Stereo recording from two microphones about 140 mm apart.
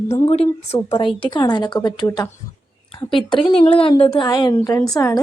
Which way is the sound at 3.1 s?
40° left (ahead or behind).